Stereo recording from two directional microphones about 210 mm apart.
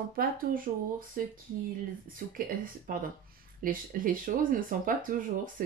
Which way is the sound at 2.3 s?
40° right (ahead or behind).